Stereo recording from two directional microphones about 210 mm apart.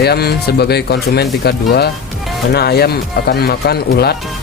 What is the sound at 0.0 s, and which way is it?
Speech, 50° left (ahead or behind).